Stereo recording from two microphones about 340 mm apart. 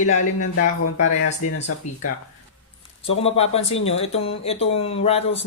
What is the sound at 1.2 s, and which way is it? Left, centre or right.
Speech, left.